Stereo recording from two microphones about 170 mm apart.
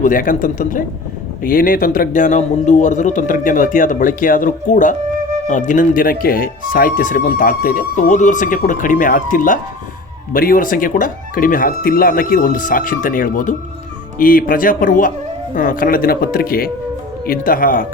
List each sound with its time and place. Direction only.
0.0 s speech: 55° left (ahead or behind)